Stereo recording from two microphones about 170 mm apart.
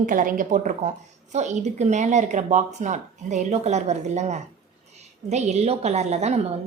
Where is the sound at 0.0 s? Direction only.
50° right (ahead or behind).